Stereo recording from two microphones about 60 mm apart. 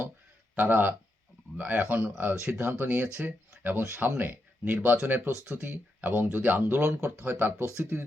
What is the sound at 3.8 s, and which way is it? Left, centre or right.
Speech, right.